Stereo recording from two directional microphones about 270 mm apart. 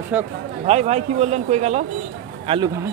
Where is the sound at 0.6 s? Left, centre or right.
Right.